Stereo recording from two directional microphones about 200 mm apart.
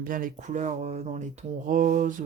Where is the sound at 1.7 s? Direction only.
40° right (ahead or behind).